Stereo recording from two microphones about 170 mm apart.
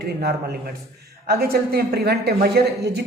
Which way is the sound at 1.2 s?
65° right (ahead or behind).